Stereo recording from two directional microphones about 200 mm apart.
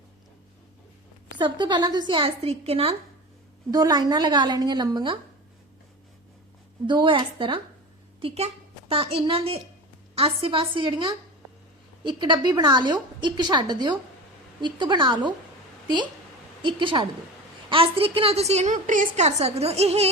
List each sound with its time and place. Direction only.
1.4 s a woman's voice: 20° right (ahead or behind)
3.7 s a woman's voice: 20° right (ahead or behind)
6.8 s a woman's voice: 25° right (ahead or behind)
16.6 s a woman's voice: 25° right (ahead or behind)